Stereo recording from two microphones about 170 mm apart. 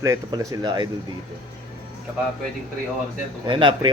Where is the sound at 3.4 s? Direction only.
30° right (ahead or behind).